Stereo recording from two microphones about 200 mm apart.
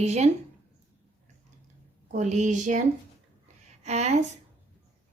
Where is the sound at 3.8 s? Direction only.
35° right (ahead or behind).